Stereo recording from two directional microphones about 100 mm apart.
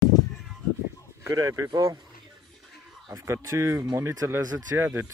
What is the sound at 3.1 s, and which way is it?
Speech, 30° right (ahead or behind).